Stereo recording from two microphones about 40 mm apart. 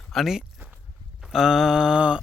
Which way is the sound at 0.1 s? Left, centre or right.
Centre.